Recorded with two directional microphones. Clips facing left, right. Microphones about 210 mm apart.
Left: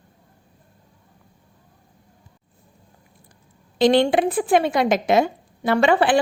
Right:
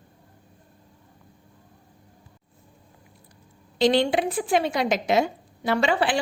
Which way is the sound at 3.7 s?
50° left (ahead or behind).